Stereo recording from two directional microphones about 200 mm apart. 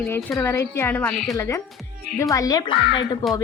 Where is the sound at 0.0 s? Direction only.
5° left (ahead or behind).